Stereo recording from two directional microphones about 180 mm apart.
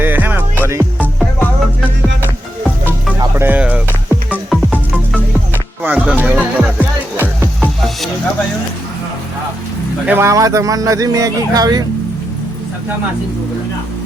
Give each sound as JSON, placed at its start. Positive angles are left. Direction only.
{"t": 0.0, "sound": "music", "side_deg": -10}
{"t": 0.9, "sound": "music", "side_deg": 5}
{"t": 3.2, "sound": "music", "side_deg": -15}
{"t": 10.1, "sound": "speech", "side_deg": -15}